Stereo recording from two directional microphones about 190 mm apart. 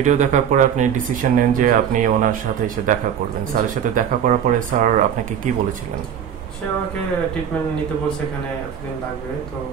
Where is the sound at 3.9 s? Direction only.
40° right (ahead or behind).